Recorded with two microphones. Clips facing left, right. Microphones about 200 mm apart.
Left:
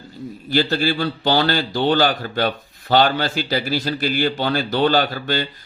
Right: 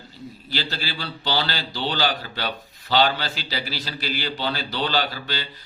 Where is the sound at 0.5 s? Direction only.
50° left (ahead or behind).